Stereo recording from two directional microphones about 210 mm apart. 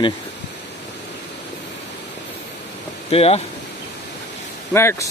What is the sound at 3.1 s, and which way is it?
Speech, 30° left (ahead or behind).